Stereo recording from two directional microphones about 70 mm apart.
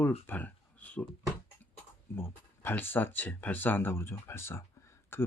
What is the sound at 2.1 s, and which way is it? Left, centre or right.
Speech, left.